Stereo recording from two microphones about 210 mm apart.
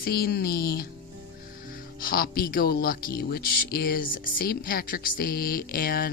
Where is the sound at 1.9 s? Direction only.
45° left (ahead or behind).